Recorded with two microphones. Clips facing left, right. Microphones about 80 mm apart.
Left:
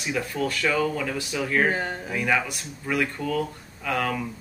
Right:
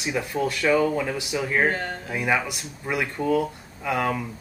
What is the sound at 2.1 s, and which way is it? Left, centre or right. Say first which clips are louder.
Speech: right 1 dB; centre.